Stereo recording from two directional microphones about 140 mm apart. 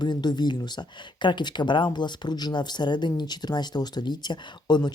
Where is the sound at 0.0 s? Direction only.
30° left (ahead or behind).